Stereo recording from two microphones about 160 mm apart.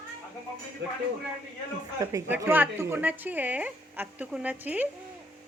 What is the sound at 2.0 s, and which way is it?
Speech, 20° right (ahead or behind).